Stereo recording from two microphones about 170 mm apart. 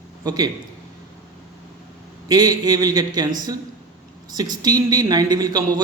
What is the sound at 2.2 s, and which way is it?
A man's voice, 25° right (ahead or behind).